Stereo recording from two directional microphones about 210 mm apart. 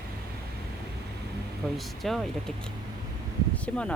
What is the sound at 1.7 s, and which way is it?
Speech, centre (ahead or behind).